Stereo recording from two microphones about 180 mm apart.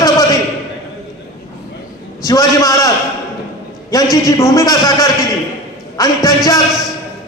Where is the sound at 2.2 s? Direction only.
20° left (ahead or behind).